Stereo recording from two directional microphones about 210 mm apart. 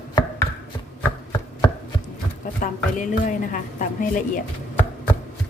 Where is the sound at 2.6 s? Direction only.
40° left (ahead or behind).